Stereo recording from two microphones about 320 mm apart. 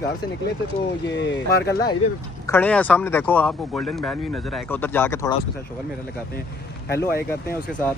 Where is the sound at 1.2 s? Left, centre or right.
Left.